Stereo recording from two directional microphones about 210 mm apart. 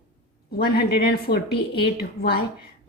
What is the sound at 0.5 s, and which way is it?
Speech, 45° left (ahead or behind).